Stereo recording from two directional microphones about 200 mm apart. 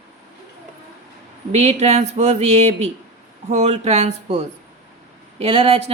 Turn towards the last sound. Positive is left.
turn(degrees=-30)  # may be behind; listen again after turning